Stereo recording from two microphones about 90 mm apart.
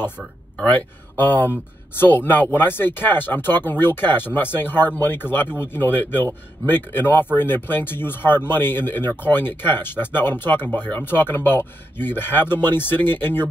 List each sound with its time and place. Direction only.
0.7 s speech: 20° left (ahead or behind)